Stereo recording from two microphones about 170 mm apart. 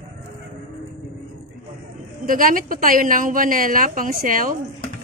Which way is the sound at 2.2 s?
55° right (ahead or behind).